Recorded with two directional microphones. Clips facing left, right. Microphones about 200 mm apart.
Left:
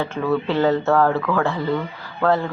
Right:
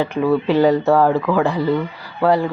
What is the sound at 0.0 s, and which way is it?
Speech, 15° right (ahead or behind).